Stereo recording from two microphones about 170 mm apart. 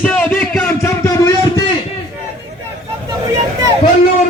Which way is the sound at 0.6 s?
10° left (ahead or behind).